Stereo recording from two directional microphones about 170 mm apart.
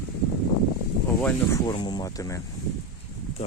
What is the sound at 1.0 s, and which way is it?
Speech, 15° left (ahead or behind).